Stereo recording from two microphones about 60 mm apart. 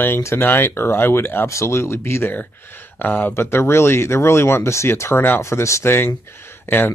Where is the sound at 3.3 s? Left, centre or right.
Left.